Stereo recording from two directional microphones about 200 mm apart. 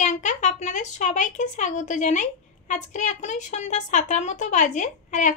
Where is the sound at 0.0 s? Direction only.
35° left (ahead or behind).